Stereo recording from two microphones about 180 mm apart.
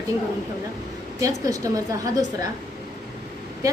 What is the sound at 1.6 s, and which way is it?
Speech, 20° right (ahead or behind).